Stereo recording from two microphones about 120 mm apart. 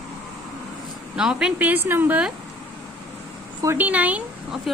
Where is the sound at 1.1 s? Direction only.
5° right (ahead or behind).